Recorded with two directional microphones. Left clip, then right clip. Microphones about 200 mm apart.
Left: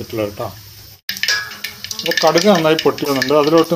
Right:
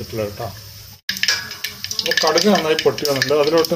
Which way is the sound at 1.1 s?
10° right (ahead or behind).